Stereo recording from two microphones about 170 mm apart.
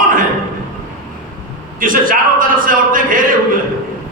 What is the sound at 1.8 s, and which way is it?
Speech, 55° right (ahead or behind).